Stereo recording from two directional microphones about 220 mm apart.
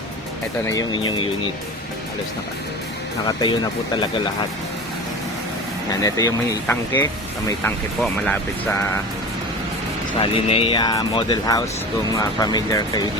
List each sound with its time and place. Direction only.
0.7 s speech: 20° left (ahead or behind)
3.2 s speech: 20° left (ahead or behind)
6.0 s speech: 15° left (ahead or behind)
10.3 s speech: 25° left (ahead or behind)